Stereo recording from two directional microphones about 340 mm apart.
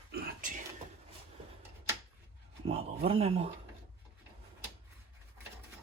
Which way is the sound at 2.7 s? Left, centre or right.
Centre.